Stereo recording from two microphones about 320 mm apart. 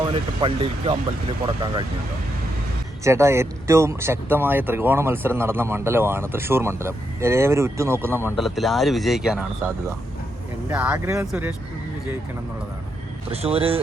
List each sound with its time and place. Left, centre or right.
0.1 s speech: centre
3.0 s speech: centre
13.3 s speech: centre